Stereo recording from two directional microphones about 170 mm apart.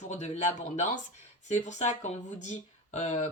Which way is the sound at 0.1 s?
45° left (ahead or behind).